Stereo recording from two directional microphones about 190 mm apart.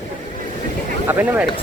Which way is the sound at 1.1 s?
10° right (ahead or behind).